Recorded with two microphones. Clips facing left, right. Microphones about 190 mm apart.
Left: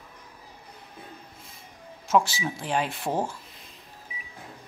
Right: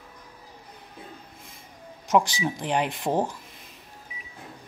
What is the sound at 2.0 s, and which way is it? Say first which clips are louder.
Speech: right 1 dB; 15° right (ahead or behind).